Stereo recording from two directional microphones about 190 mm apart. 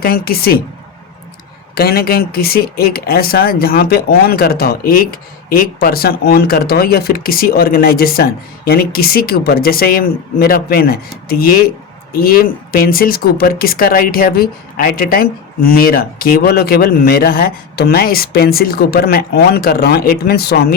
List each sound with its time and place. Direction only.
0.0 s speech: 55° left (ahead or behind)
1.7 s speech: 55° left (ahead or behind)